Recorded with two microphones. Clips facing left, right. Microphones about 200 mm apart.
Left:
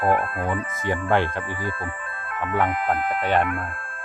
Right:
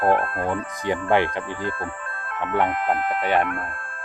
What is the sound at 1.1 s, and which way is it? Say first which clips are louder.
Speech: right 2 dB; 15° right (ahead or behind).